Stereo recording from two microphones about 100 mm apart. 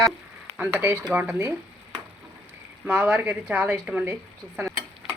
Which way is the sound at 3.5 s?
15° right (ahead or behind).